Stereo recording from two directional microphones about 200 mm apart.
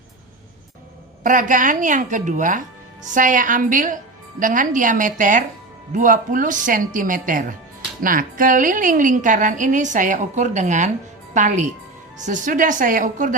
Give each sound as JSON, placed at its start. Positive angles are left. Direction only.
{"t": 1.2, "sound": "a woman's voice", "side_deg": -40}